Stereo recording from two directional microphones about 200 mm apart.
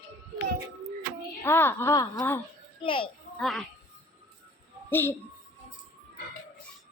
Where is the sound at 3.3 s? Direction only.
Centre (ahead or behind).